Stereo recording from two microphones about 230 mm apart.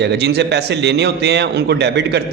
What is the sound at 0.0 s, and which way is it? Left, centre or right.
A man's voice, right.